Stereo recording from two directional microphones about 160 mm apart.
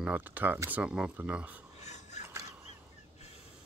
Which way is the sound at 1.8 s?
45° left (ahead or behind).